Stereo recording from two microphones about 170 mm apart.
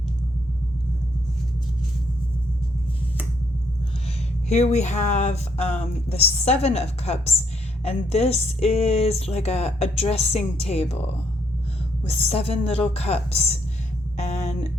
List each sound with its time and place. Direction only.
4.4 s speech: 40° left (ahead or behind)
12.0 s speech: 35° left (ahead or behind)
14.2 s a sound: 40° left (ahead or behind)